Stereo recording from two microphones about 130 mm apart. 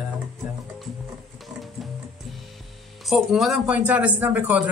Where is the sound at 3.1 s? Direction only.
Centre (ahead or behind).